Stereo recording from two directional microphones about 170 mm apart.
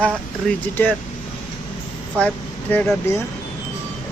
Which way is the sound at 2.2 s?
5° left (ahead or behind).